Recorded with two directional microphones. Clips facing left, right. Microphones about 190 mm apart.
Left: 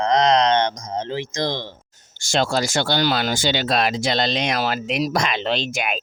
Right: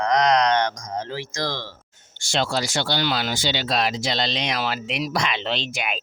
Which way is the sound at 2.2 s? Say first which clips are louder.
Left 3 dB; 45° left (ahead or behind).